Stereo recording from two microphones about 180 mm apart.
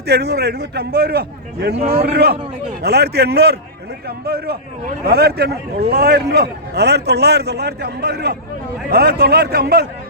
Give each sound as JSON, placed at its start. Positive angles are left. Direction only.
{"t": 0.1, "sound": "a man's voice", "side_deg": -65}